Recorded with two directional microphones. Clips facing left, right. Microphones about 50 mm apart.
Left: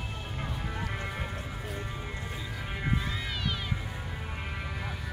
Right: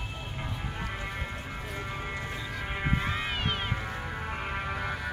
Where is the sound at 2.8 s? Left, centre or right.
Right.